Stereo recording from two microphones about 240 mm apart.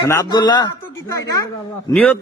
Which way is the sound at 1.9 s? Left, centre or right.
Centre.